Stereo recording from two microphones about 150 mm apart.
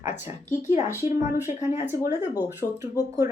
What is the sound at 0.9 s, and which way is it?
Speech, 15° right (ahead or behind).